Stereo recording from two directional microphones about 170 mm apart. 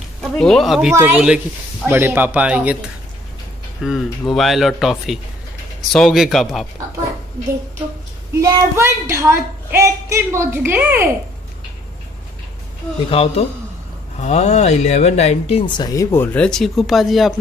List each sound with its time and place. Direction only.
0.2 s a woman's voice: centre (ahead or behind)
3.8 s speech: centre (ahead or behind)
8.4 s a woman's voice: 20° right (ahead or behind)
13.1 s speech: 35° left (ahead or behind); by 17.3 s centre (ahead or behind)